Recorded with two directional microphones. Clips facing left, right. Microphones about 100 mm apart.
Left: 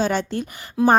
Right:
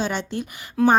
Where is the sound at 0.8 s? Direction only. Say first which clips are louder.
Even; 15° left (ahead or behind).